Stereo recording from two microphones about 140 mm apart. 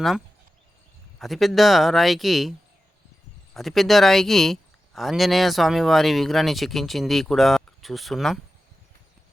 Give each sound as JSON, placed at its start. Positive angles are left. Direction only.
{"t": 1.2, "sound": "speech", "side_deg": 0}